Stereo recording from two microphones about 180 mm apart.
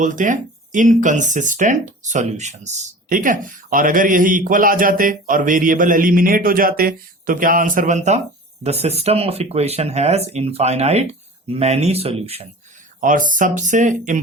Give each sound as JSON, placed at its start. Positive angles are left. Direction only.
{"t": 0.0, "sound": "speech", "side_deg": -45}
{"t": 13.0, "sound": "speech", "side_deg": -50}